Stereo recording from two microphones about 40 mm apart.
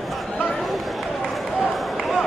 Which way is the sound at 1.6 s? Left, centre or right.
Centre.